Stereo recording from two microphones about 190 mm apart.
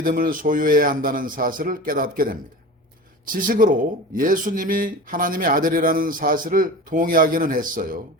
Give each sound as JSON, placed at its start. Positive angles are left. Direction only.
{"t": 0.0, "sound": "speech", "side_deg": -50}